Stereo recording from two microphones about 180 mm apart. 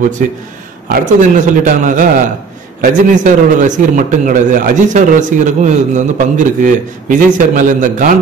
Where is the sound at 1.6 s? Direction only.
45° right (ahead or behind).